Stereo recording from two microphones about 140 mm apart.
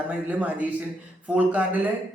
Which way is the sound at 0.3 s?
10° right (ahead or behind).